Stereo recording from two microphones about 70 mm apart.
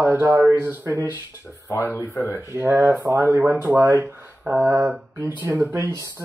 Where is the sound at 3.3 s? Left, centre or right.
Right.